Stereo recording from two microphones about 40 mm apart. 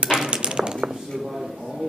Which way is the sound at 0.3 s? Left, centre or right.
Right.